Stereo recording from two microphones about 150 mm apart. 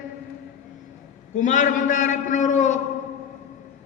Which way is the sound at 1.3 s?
55° left (ahead or behind).